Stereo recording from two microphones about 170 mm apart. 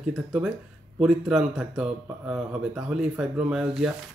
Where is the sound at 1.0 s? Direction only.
5° right (ahead or behind).